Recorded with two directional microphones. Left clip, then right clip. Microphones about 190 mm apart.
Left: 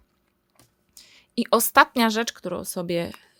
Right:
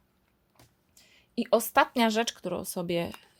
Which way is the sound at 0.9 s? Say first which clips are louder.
Left 5 dB; 35° left (ahead or behind).